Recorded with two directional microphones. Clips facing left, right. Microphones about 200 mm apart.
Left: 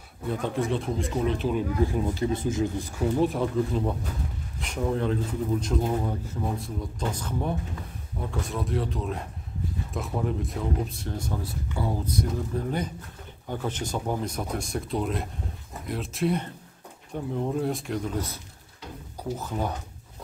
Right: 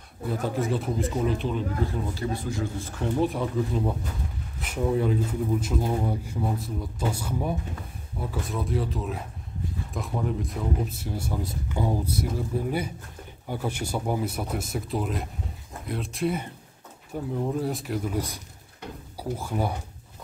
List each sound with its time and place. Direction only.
0.3 s speech: 5° right (ahead or behind)
1.5 s speech: 15° left (ahead or behind)
3.0 s speech: centre (ahead or behind)